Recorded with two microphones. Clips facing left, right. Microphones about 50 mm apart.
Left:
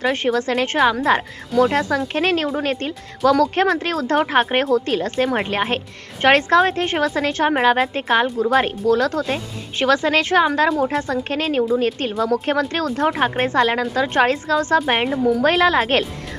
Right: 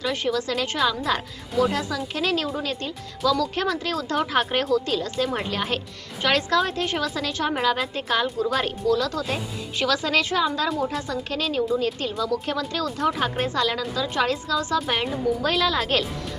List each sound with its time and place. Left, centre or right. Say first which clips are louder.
0.0 s a woman's voice: left 6 dB; left